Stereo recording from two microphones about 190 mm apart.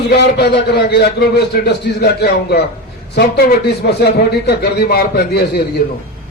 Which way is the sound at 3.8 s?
60° left (ahead or behind).